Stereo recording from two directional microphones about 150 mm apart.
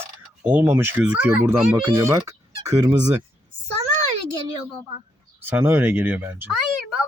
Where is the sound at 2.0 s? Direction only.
20° right (ahead or behind).